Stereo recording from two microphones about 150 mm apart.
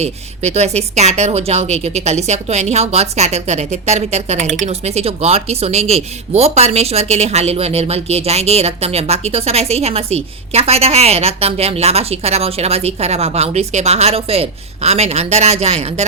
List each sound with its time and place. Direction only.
0.0 s speech: 45° right (ahead or behind)